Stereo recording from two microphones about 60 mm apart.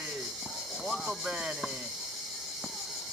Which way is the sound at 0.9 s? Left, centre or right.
Centre.